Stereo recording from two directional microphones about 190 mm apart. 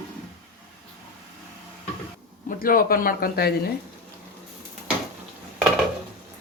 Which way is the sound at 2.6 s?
50° left (ahead or behind).